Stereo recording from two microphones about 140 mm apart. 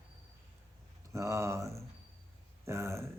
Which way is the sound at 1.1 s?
20° right (ahead or behind).